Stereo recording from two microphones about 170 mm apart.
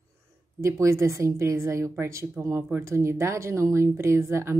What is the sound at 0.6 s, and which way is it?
A woman's voice, 15° right (ahead or behind).